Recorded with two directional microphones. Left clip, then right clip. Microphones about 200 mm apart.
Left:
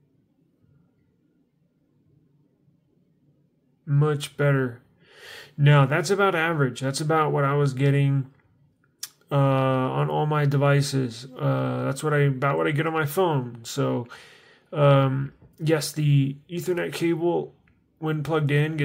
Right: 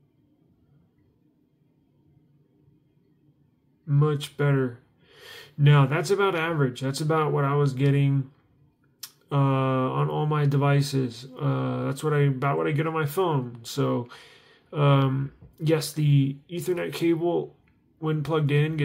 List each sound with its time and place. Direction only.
3.8 s speech: 15° left (ahead or behind)